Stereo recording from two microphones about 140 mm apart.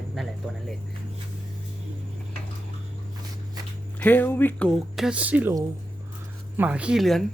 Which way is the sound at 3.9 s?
15° left (ahead or behind).